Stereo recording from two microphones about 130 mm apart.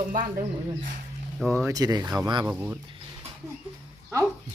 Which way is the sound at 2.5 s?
15° right (ahead or behind).